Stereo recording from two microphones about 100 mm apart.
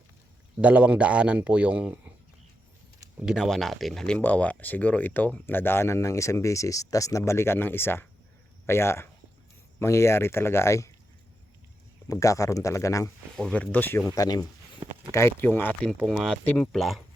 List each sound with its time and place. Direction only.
0.6 s speech: 15° right (ahead or behind)
3.2 s speech: 5° right (ahead or behind); by 10.9 s 30° left (ahead or behind)
12.0 s speech: 30° left (ahead or behind)
13.3 s speech: 10° left (ahead or behind)
14.2 s speech: 40° left (ahead or behind)
15.1 s speech: 25° left (ahead or behind)
15.9 s speech: centre (ahead or behind)